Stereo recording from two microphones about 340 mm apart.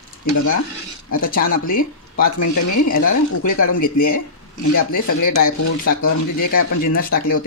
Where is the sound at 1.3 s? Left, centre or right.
Left.